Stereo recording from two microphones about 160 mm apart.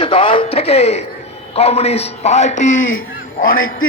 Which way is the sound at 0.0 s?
35° left (ahead or behind).